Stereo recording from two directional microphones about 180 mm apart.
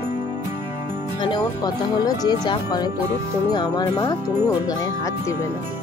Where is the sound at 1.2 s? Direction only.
25° left (ahead or behind).